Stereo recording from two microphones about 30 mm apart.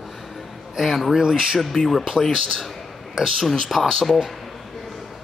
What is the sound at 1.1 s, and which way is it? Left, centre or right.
Speech, right.